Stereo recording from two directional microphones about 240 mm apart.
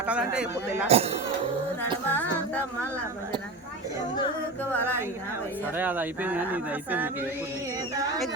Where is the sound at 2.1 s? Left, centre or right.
Centre.